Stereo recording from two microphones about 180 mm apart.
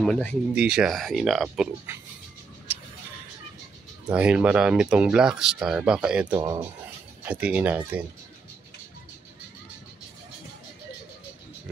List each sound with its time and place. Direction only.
0.0 s speech: 5° left (ahead or behind)
4.1 s speech: 5° right (ahead or behind)
6.3 s speech: 20° right (ahead or behind)
7.2 s speech: 5° right (ahead or behind)